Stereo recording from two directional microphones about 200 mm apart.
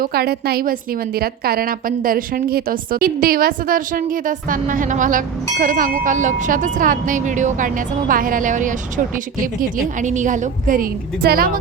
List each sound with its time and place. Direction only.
0.0 s a woman's voice: 50° right (ahead or behind)